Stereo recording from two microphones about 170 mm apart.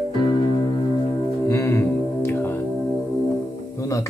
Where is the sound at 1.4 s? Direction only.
20° left (ahead or behind).